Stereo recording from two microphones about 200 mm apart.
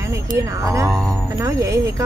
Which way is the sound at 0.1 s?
15° right (ahead or behind).